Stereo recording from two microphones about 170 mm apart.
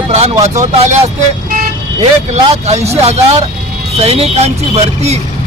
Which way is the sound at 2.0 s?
40° right (ahead or behind).